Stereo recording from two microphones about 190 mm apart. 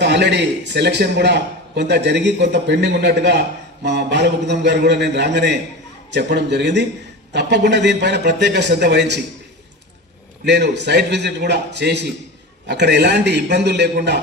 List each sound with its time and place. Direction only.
0.0 s a man's voice: 65° right (ahead or behind)
10.4 s a man's voice: 65° right (ahead or behind)